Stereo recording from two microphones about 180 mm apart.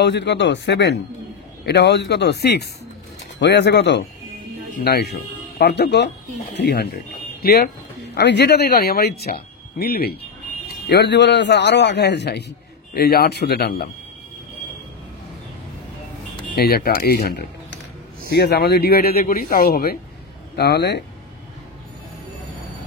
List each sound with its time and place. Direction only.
0.0 s a man's voice: 75° left (ahead or behind)
4.7 s speech: 60° left (ahead or behind)
10.9 s a man's voice: 70° left (ahead or behind)
16.5 s speech: 60° left (ahead or behind)